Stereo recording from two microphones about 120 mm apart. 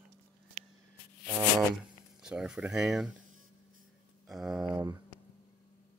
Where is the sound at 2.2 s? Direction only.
5° right (ahead or behind).